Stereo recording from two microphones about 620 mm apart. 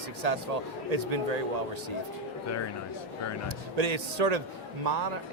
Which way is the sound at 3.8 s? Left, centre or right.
Right.